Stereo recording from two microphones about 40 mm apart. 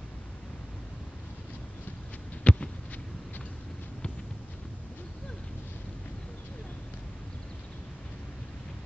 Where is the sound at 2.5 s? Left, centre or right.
Left.